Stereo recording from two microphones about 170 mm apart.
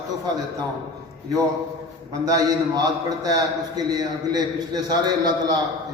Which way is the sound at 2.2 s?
20° right (ahead or behind).